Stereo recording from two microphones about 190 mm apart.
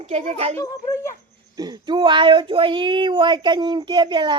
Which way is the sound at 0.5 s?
15° left (ahead or behind).